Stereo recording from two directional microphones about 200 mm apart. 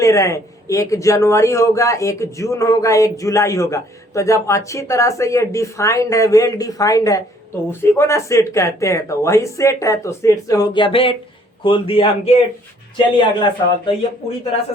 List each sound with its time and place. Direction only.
0.0 s a man's voice: 15° left (ahead or behind)